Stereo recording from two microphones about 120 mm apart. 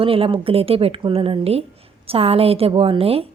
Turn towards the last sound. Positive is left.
turn(degrees=-55)  # may be behind; listen again after turning